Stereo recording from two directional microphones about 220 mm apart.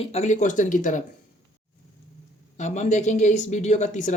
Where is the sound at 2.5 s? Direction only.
35° left (ahead or behind).